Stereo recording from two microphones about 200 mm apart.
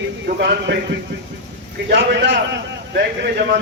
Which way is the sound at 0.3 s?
55° right (ahead or behind).